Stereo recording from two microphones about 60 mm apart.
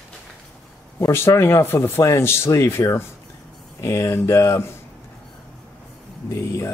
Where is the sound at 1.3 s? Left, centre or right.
Left.